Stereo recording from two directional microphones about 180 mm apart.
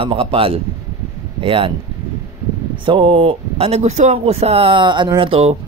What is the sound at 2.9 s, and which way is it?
Speech, 30° right (ahead or behind).